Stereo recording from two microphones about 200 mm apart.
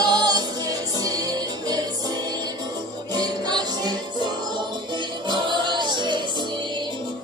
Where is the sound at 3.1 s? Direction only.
20° right (ahead or behind).